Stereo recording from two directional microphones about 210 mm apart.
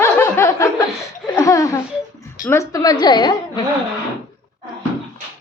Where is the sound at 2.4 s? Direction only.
15° left (ahead or behind).